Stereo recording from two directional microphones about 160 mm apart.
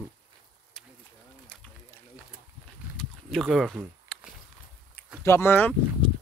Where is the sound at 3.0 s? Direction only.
5° left (ahead or behind).